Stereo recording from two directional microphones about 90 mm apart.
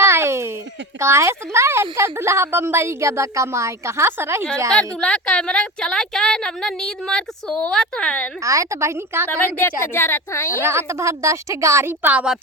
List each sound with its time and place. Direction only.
0.0 s a sound: 30° right (ahead or behind)
0.9 s speech: 30° right (ahead or behind)
4.7 s a woman's voice: 10° left (ahead or behind)
8.4 s speech: 35° right (ahead or behind)
9.3 s speech: 20° left (ahead or behind)
10.6 s speech: 30° right (ahead or behind)
12.0 s a woman's voice: 10° right (ahead or behind)